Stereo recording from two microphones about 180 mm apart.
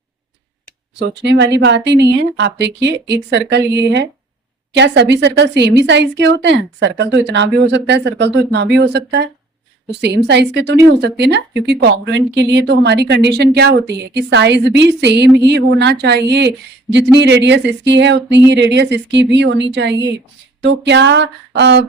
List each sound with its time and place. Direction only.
0.9 s a woman's voice: 75° right (ahead or behind)